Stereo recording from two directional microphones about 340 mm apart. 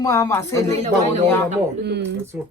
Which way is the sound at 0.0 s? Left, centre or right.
Centre.